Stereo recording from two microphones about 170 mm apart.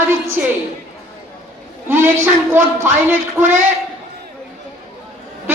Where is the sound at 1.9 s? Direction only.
10° right (ahead or behind).